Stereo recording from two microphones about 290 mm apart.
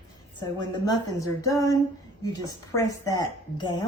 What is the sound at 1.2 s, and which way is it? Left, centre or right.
A woman's voice, centre.